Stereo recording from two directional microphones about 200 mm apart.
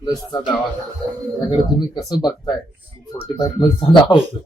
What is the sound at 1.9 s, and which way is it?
Speech, 20° left (ahead or behind).